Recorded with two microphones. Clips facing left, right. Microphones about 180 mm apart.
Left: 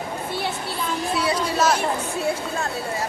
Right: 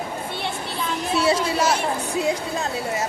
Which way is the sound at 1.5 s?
10° right (ahead or behind).